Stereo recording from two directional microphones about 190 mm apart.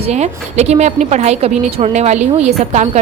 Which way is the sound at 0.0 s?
35° right (ahead or behind).